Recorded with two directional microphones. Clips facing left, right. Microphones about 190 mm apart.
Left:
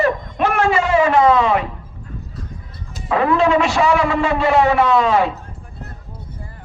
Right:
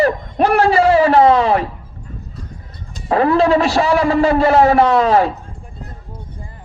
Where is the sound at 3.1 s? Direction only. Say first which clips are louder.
Right 2 dB; 35° right (ahead or behind).